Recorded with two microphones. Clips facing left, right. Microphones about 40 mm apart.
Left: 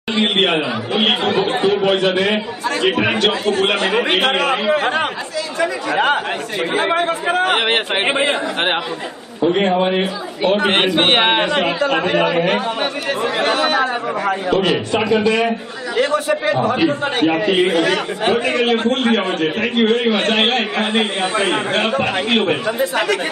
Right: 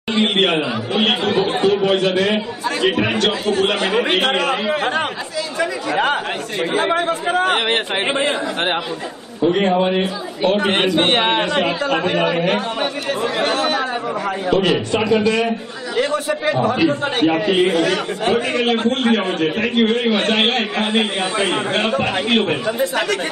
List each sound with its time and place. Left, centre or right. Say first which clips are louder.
0.1 s speech: even; centre
3.7 s a man's voice: left 1 dB; centre; by 8.8 s left
9.4 s speech: even; centre
11.0 s a man's voice: left 2 dB; left
11.5 s a man's voice: left 1 dB; centre